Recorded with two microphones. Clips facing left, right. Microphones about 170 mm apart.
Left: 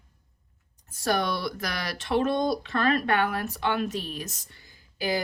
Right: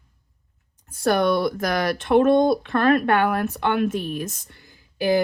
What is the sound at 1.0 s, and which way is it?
Speech, 55° right (ahead or behind).